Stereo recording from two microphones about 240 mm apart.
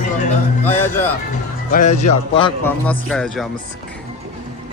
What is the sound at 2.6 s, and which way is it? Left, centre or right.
Speech, centre.